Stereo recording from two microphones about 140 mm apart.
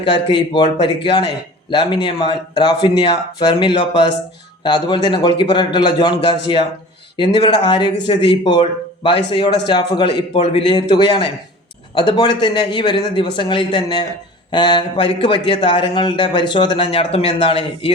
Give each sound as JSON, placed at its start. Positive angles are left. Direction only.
{"t": 0.1, "sound": "a man's voice", "side_deg": 35}